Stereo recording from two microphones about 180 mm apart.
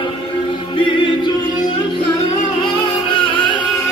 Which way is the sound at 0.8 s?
25° left (ahead or behind).